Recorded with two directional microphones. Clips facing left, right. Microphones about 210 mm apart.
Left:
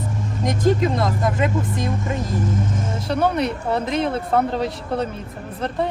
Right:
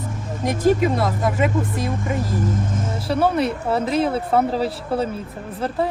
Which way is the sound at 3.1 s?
5° right (ahead or behind).